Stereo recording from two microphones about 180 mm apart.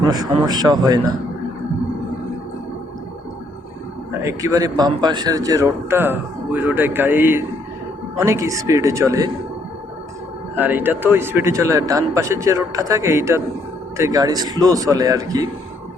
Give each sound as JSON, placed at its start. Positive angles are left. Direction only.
{"t": 0.0, "sound": "speech", "side_deg": -20}
{"t": 4.2, "sound": "speech", "side_deg": -15}
{"t": 10.5, "sound": "speech", "side_deg": -10}